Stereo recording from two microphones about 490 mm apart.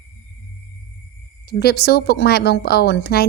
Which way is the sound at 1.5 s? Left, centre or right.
Centre.